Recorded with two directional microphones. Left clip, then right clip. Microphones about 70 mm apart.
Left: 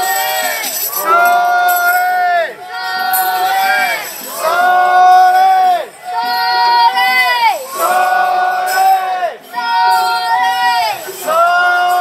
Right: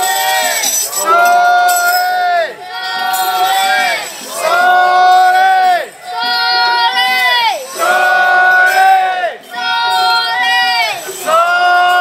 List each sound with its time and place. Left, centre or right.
0.0 s music: right
0.4 s music: centre
1.8 s a sound: centre
3.3 s crowd: centre
9.6 s child singing: right